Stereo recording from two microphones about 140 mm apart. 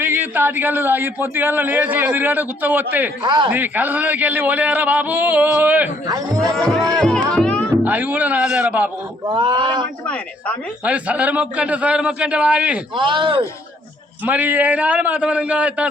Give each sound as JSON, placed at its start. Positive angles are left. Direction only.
{"t": 0.0, "sound": "a man's voice", "side_deg": -15}
{"t": 3.2, "sound": "a man's voice", "side_deg": -30}
{"t": 3.5, "sound": "a man's voice", "side_deg": -15}
{"t": 6.6, "sound": "speech", "side_deg": 0}
{"t": 7.0, "sound": "music", "side_deg": 5}
{"t": 7.9, "sound": "a man's voice", "side_deg": -10}
{"t": 9.2, "sound": "a man's voice", "side_deg": -35}
{"t": 10.1, "sound": "a woman's voice", "side_deg": 10}
{"t": 10.8, "sound": "a man's voice", "side_deg": -10}
{"t": 13.0, "sound": "a man's voice", "side_deg": -35}
{"t": 14.3, "sound": "a man's voice", "side_deg": -10}